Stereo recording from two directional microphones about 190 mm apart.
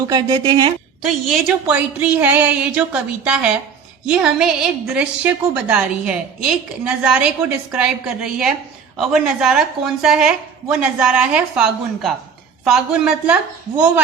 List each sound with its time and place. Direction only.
0.1 s a woman's voice: 20° right (ahead or behind)
1.0 s a woman's voice: centre (ahead or behind)